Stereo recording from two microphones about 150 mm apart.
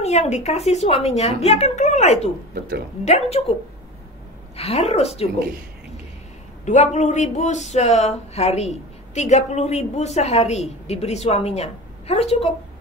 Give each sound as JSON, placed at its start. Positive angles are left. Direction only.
{"t": 0.0, "sound": "speech", "side_deg": 45}
{"t": 4.6, "sound": "speech", "side_deg": 45}
{"t": 6.6, "sound": "speech", "side_deg": 50}